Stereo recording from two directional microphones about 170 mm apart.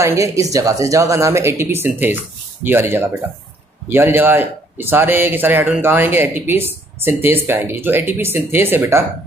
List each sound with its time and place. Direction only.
0.0 s speech: 20° right (ahead or behind)